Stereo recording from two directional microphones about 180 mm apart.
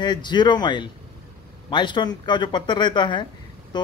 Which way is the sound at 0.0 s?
25° left (ahead or behind).